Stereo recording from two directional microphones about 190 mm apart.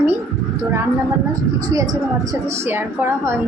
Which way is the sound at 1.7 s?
20° right (ahead or behind).